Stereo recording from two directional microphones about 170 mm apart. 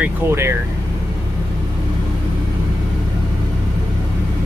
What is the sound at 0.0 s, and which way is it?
Speech, 15° right (ahead or behind).